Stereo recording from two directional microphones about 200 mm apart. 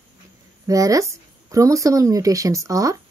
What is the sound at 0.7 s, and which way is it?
Speech, 15° right (ahead or behind).